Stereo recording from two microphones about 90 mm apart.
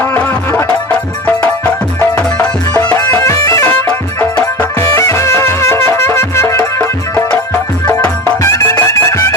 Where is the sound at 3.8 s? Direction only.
20° left (ahead or behind).